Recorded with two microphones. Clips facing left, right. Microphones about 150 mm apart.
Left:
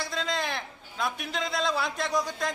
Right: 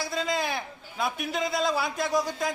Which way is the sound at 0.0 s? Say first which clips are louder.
Right 2 dB; 5° right (ahead or behind).